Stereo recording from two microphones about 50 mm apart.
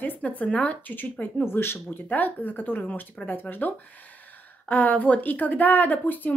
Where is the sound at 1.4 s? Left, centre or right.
Left.